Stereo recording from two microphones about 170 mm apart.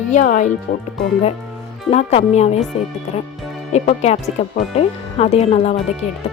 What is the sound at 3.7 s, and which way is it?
Speech, 40° left (ahead or behind).